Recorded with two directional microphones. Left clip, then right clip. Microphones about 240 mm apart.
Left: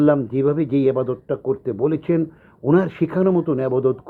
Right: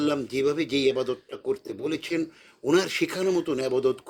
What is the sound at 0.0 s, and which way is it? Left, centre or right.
Speech, right.